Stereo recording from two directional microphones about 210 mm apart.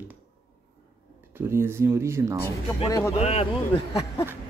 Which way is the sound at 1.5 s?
10° right (ahead or behind).